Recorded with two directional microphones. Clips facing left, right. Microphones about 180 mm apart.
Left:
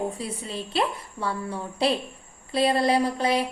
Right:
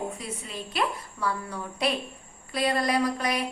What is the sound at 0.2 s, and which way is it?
A woman's voice, 30° left (ahead or behind).